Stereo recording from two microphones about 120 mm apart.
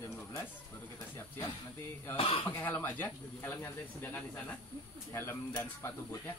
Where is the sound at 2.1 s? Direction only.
50° left (ahead or behind).